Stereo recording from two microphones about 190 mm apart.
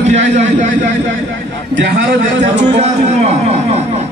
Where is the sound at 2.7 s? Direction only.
35° right (ahead or behind).